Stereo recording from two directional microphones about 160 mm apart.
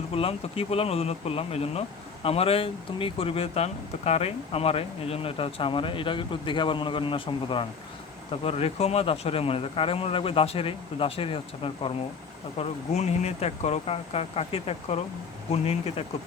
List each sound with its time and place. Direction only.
0.1 s speech: 35° left (ahead or behind)